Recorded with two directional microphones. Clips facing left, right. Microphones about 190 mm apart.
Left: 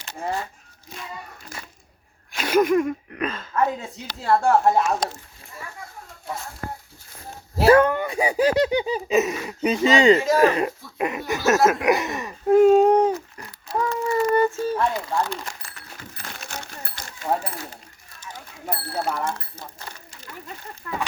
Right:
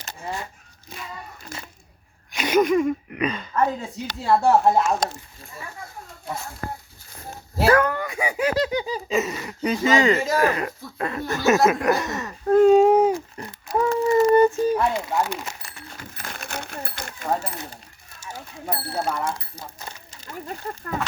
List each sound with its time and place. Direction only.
2.3 s speech: 5° left (ahead or behind)
7.6 s speech: 25° left (ahead or behind)
11.3 s speech: centre (ahead or behind)
11.9 s speech: 15° left (ahead or behind); by 13.2 s 10° right (ahead or behind)
13.3 s a sound: 25° right (ahead or behind)
14.3 s speech: 20° right (ahead or behind)
16.4 s a sound: 55° right (ahead or behind)
18.6 s speech: 5° left (ahead or behind)
19.9 s a sound: 25° right (ahead or behind)